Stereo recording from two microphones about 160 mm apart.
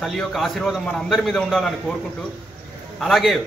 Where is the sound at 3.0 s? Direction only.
Centre (ahead or behind).